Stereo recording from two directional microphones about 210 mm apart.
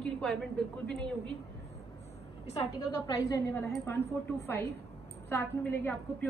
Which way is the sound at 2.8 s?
20° left (ahead or behind).